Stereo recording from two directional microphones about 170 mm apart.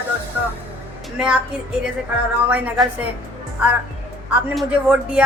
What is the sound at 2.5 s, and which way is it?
Speech, 5° right (ahead or behind).